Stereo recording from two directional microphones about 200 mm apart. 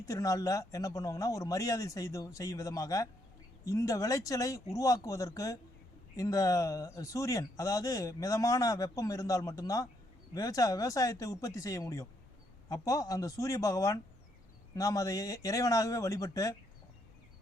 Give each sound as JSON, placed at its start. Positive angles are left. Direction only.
{"t": 0.0, "sound": "a man's voice", "side_deg": 15}